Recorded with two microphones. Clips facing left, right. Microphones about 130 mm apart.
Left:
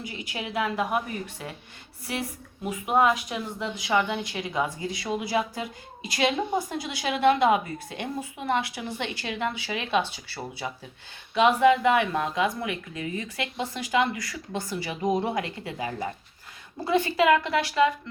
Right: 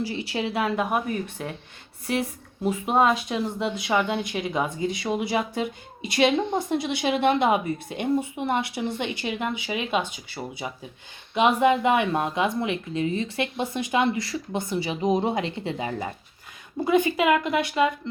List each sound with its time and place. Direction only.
0.0 s speech: 30° right (ahead or behind)
2.6 s speech: 25° right (ahead or behind)